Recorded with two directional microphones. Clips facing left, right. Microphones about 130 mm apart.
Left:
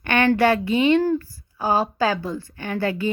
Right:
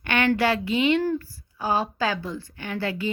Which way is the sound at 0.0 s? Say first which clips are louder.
Left 4 dB; 50° left (ahead or behind).